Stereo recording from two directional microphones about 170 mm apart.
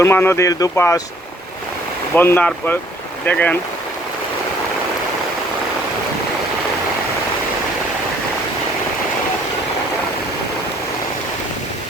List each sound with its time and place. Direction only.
0.0 s speech: 15° left (ahead or behind)
2.1 s speech: 10° left (ahead or behind)